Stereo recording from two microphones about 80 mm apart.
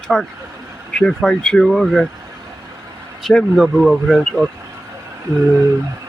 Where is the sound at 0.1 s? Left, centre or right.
Centre.